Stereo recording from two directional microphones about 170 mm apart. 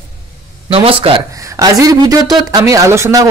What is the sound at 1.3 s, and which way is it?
Speech, 20° right (ahead or behind).